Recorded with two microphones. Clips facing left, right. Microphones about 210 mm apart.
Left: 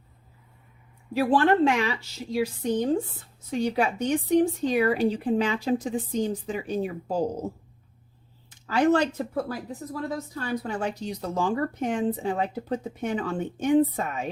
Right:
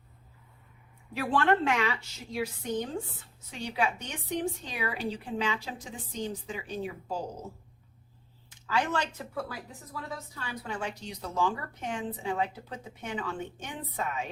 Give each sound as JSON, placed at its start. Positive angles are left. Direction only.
{"t": 1.2, "sound": "a woman's voice", "side_deg": 35}
{"t": 8.6, "sound": "speech", "side_deg": 45}